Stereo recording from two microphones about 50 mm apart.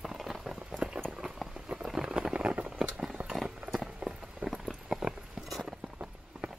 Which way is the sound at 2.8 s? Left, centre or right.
Centre.